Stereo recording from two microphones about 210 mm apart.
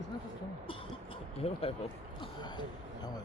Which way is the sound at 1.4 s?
30° left (ahead or behind).